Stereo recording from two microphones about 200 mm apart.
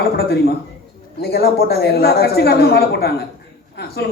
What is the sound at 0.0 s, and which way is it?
A woman's voice, 50° left (ahead or behind).